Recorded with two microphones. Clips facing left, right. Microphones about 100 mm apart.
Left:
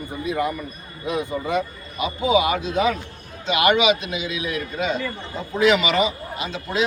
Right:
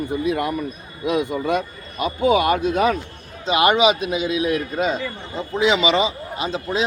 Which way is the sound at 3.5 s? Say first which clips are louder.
Right 2 dB; 35° right (ahead or behind).